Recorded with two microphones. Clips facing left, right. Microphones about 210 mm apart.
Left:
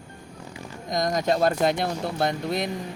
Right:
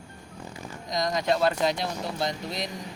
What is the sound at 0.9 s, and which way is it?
Speech, 50° left (ahead or behind).